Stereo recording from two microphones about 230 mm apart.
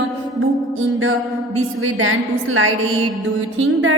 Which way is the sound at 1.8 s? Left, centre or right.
Right.